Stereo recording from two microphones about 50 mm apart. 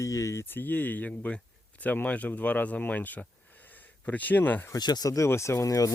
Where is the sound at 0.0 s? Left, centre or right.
Left.